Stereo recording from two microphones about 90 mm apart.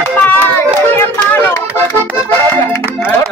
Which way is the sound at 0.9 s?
30° left (ahead or behind).